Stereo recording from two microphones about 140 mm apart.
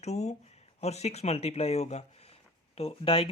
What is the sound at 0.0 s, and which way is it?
Speech, 55° left (ahead or behind).